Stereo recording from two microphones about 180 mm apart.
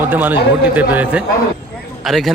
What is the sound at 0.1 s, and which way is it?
A man's voice, 10° right (ahead or behind).